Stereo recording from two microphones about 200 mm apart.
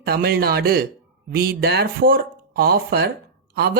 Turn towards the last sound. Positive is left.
turn(degrees=-50)  # may be behind; listen again after turning